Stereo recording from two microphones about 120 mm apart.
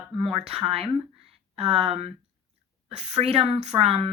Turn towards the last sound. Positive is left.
turn(degrees=-55)  # may be behind; listen again after turning